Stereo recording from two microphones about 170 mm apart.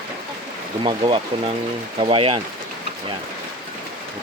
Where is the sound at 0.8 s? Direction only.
30° right (ahead or behind).